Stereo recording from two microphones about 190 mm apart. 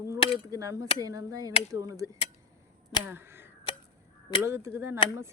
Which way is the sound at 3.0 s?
10° right (ahead or behind).